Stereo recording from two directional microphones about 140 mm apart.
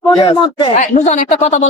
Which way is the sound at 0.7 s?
55° left (ahead or behind).